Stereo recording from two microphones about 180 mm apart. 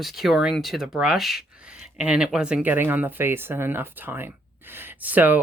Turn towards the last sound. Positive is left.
turn(degrees=-10)  # may be behind; listen again after turning